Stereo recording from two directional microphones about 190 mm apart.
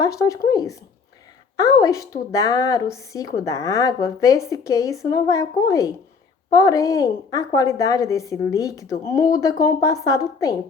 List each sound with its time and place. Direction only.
0.0 s a woman's voice: 15° left (ahead or behind)